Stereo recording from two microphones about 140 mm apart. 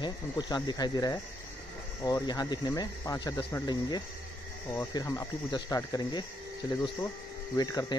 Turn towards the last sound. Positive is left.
turn(degrees=25)  # may be behind; listen again after turning